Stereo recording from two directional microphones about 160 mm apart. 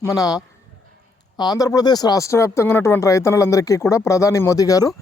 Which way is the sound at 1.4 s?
25° left (ahead or behind).